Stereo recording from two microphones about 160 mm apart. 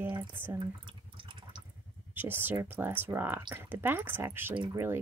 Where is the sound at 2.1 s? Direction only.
10° right (ahead or behind).